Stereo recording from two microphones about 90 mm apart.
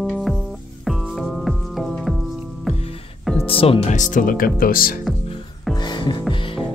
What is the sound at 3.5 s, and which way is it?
Music, 90° left.